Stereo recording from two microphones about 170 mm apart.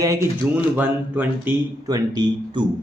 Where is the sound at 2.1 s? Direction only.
25° right (ahead or behind).